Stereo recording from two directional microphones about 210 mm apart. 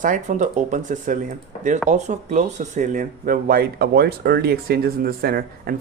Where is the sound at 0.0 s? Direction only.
35° right (ahead or behind).